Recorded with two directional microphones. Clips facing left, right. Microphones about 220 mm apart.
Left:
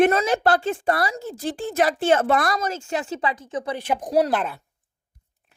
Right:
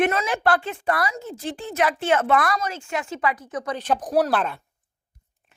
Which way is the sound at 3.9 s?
25° left (ahead or behind).